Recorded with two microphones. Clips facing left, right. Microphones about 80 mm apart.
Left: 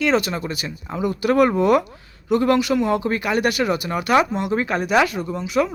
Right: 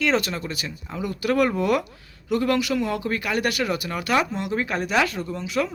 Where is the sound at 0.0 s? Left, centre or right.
Centre; by 4.6 s left.